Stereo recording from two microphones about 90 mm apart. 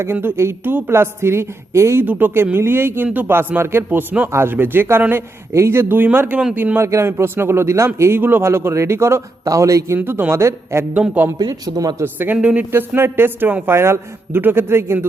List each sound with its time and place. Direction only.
0.0 s a man's voice: 25° right (ahead or behind)
6.8 s a man's voice: 30° right (ahead or behind)
10.0 s a man's voice: 25° right (ahead or behind)
10.9 s speech: 15° right (ahead or behind)
11.3 s speech: 45° right (ahead or behind)
12.0 s a man's voice: 20° right (ahead or behind)
12.4 s speech: 10° right (ahead or behind)
12.7 s a man's voice: 25° right (ahead or behind)